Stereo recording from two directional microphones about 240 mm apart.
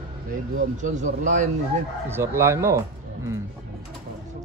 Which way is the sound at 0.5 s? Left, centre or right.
Right.